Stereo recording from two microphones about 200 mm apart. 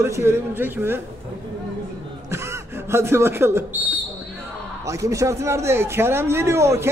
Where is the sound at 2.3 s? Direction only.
15° right (ahead or behind).